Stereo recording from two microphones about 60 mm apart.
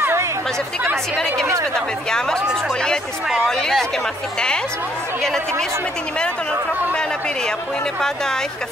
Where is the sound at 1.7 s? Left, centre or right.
Centre.